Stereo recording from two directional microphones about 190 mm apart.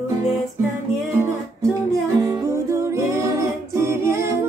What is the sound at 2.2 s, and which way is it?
Music, 15° right (ahead or behind).